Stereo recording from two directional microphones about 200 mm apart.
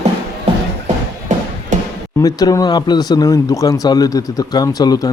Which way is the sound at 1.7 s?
40° right (ahead or behind).